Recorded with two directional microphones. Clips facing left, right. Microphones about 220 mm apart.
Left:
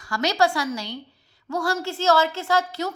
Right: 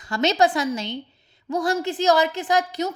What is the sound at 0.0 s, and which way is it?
A woman's voice, 20° right (ahead or behind).